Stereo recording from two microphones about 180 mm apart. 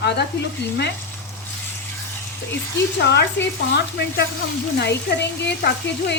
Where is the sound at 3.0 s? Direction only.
70° left (ahead or behind).